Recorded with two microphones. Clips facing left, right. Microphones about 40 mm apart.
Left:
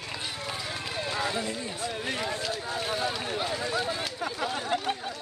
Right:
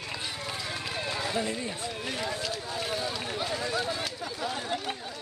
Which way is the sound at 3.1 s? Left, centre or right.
Centre.